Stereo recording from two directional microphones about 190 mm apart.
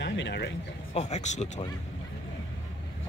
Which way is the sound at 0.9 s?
35° left (ahead or behind).